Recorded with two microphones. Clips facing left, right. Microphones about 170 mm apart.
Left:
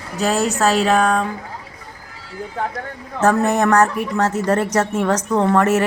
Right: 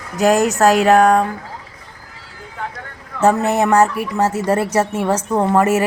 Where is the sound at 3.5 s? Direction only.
10° right (ahead or behind).